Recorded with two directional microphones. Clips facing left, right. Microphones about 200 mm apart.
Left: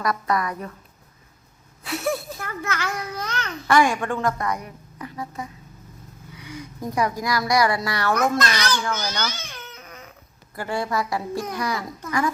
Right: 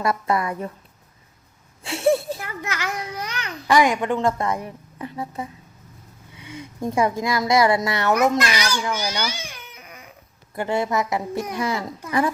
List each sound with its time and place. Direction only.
0.0 s a child's voice: 25° right (ahead or behind)
1.8 s a sound: 30° right (ahead or behind)
2.4 s a child's voice: 15° right (ahead or behind)
8.1 s a child's voice: 10° right (ahead or behind)
10.5 s a child's voice: 20° right (ahead or behind)